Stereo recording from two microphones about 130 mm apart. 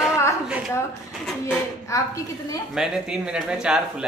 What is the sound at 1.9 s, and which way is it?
Speech, 25° left (ahead or behind).